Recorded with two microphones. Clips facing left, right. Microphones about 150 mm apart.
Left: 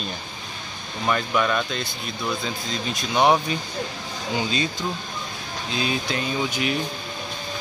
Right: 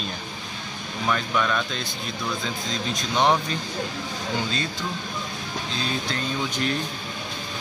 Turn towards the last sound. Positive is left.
turn(degrees=10)  # may be behind; listen again after turning